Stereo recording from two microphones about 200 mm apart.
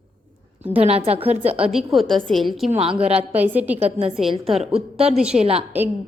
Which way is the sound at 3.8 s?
30° right (ahead or behind).